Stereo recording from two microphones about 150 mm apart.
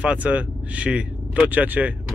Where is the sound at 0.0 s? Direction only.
10° right (ahead or behind).